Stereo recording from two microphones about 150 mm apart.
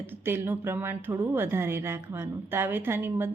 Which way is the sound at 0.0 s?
15° right (ahead or behind).